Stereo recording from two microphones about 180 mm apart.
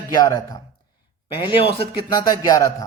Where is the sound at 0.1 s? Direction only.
20° left (ahead or behind).